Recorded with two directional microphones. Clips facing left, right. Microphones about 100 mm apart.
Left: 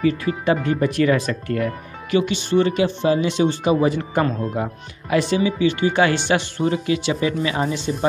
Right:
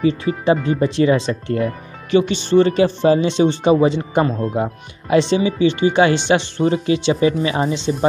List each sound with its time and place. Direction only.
0.0 s speech: 25° right (ahead or behind)